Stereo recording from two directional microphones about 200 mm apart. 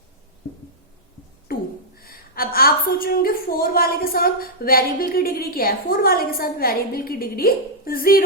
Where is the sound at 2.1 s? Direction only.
45° left (ahead or behind).